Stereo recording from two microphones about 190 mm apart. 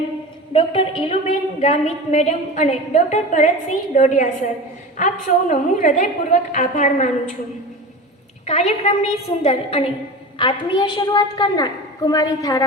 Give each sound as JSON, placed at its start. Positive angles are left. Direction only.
{"t": 0.5, "sound": "a woman's voice", "side_deg": 30}
{"t": 8.4, "sound": "a woman's voice", "side_deg": 35}